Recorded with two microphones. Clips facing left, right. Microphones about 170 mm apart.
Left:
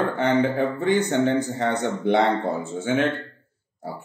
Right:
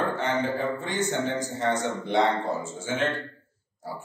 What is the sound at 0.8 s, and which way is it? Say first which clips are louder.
Speech: left 7 dB; 60° left (ahead or behind).